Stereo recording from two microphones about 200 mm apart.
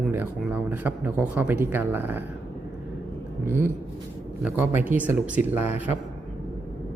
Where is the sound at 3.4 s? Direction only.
10° right (ahead or behind).